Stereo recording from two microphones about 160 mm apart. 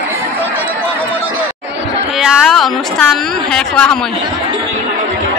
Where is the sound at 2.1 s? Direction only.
Centre (ahead or behind).